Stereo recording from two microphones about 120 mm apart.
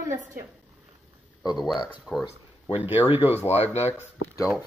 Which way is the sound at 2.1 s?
25° left (ahead or behind).